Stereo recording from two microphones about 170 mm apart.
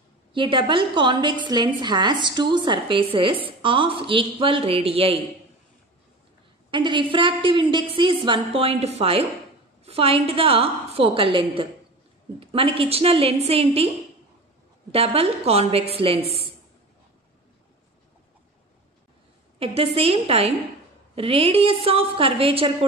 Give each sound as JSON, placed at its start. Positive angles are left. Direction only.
{"t": 0.3, "sound": "a woman's voice", "side_deg": -30}
{"t": 6.7, "sound": "a woman's voice", "side_deg": -30}
{"t": 14.9, "sound": "a woman's voice", "side_deg": -35}
{"t": 19.6, "sound": "a woman's voice", "side_deg": -35}